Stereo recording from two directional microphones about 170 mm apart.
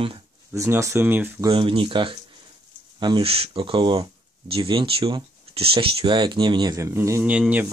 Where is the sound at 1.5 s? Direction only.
30° right (ahead or behind); by 7.7 s 10° right (ahead or behind).